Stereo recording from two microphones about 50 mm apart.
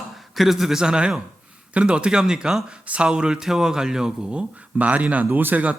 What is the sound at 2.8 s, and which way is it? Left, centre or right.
Speech, right.